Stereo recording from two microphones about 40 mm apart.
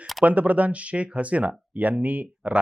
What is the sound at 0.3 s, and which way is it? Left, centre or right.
Speech, right.